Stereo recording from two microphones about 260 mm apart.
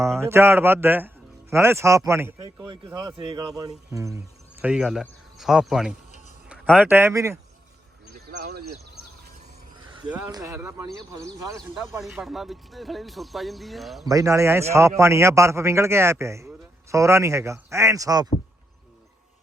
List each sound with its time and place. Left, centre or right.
0.0 s speech: centre
4.6 s speech: centre
8.3 s speech: right
10.1 s speech: centre
11.3 s speech: centre
14.0 s speech: centre